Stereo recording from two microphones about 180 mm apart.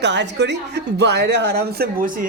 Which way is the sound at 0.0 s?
80° right.